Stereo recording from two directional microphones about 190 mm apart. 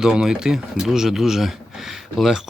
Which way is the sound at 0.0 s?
5° right (ahead or behind).